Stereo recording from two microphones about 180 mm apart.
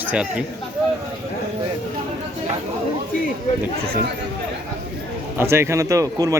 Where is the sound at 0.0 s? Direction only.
10° right (ahead or behind).